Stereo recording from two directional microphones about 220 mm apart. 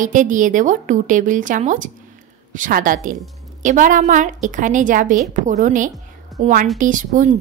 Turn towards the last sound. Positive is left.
turn(degrees=-35)  # may be behind; listen again after turning